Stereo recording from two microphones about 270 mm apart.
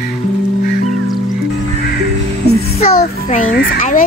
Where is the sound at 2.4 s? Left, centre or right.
Left.